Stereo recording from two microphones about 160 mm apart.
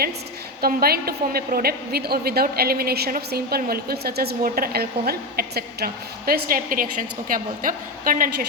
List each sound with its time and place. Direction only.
0.6 s a woman's voice: 70° right (ahead or behind)